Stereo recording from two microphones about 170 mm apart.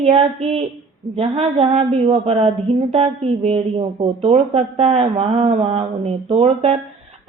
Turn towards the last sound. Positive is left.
turn(degrees=-40)  # may be behind; listen again after turning